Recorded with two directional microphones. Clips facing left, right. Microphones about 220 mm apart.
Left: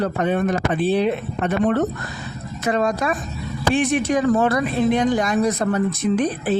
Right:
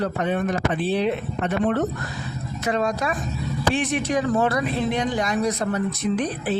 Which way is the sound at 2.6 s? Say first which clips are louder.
Left 3 dB; 50° left (ahead or behind).